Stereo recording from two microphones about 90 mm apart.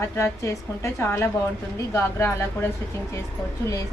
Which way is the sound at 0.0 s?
30° left (ahead or behind).